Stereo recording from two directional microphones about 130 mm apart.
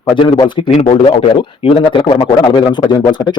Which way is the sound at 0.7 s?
50° left (ahead or behind).